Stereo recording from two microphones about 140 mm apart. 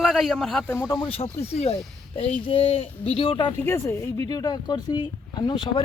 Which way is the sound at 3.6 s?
20° left (ahead or behind).